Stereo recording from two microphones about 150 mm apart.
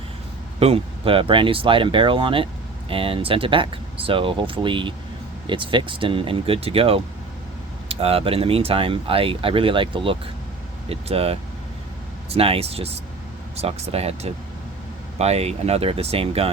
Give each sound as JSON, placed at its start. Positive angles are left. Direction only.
{"t": 0.6, "sound": "speech", "side_deg": -40}